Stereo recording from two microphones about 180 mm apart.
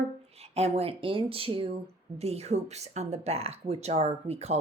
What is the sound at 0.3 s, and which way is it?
Speech, 35° right (ahead or behind).